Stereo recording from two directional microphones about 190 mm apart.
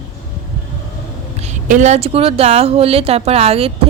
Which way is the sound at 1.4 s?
40° right (ahead or behind).